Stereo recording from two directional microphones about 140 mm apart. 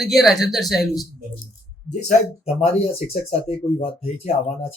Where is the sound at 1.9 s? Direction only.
55° left (ahead or behind).